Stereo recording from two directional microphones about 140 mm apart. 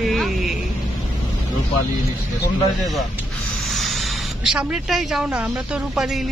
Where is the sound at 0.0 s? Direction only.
Centre (ahead or behind).